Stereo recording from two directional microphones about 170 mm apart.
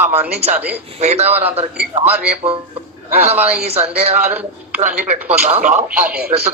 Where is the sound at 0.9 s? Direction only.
40° right (ahead or behind).